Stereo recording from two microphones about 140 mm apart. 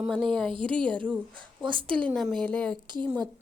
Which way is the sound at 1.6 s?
35° right (ahead or behind).